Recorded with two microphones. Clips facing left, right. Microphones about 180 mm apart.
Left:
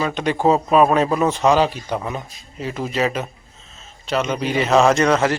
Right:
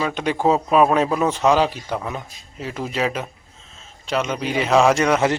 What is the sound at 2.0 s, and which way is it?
Speech, 5° left (ahead or behind).